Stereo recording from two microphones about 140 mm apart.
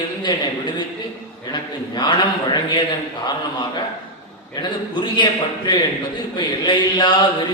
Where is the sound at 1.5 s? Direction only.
30° left (ahead or behind).